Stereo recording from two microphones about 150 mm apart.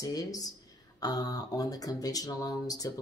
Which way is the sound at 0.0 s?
25° left (ahead or behind).